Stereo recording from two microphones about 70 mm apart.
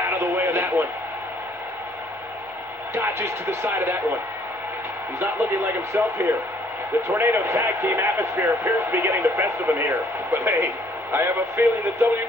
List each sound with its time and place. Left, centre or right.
0.0 s radio: right
2.9 s speech: right
5.2 s speech: right